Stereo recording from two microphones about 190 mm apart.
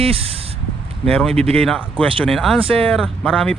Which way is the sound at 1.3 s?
30° right (ahead or behind).